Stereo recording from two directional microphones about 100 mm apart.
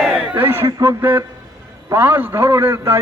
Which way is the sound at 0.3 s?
20° right (ahead or behind).